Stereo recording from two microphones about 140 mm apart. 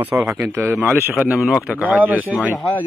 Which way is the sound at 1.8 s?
10° right (ahead or behind).